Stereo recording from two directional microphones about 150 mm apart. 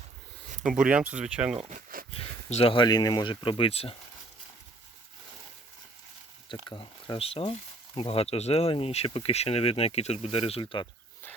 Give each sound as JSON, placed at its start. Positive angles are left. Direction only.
{"t": 0.6, "sound": "speech", "side_deg": -5}
{"t": 1.7, "sound": "a sound", "side_deg": -70}
{"t": 2.1, "sound": "speech", "side_deg": 40}
{"t": 6.7, "sound": "speech", "side_deg": 30}